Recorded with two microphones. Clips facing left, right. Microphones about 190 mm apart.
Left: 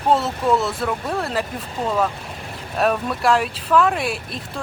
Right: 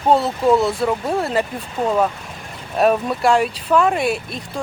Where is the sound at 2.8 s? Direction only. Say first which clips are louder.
Right 4 dB; centre (ahead or behind).